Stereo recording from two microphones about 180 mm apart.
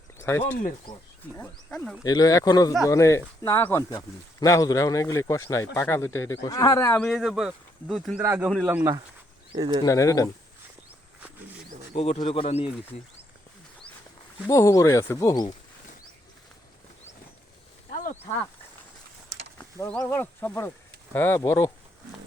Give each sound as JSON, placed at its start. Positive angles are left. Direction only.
{"t": 0.2, "sound": "speech", "side_deg": 15}
{"t": 2.0, "sound": "speech", "side_deg": 20}
{"t": 8.2, "sound": "speech", "side_deg": -15}
{"t": 9.8, "sound": "speech", "side_deg": 15}
{"t": 11.9, "sound": "speech", "side_deg": 40}
{"t": 14.4, "sound": "speech", "side_deg": 15}
{"t": 17.9, "sound": "a sound", "side_deg": 40}
{"t": 19.5, "sound": "a sound", "side_deg": 10}
{"t": 20.0, "sound": "speech", "side_deg": 15}